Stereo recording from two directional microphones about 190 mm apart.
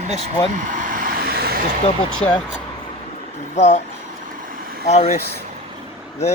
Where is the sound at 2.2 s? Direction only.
30° left (ahead or behind).